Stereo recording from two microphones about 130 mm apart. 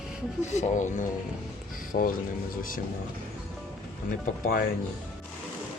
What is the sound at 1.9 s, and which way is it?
Speech, 90° left.